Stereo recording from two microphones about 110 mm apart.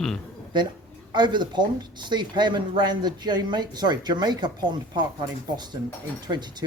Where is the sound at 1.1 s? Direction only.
45° right (ahead or behind).